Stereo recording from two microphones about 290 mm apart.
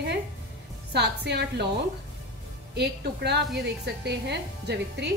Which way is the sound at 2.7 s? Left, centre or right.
Right.